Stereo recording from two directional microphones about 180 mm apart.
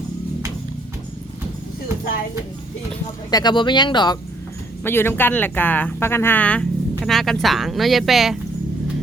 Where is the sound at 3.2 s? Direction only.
20° left (ahead or behind).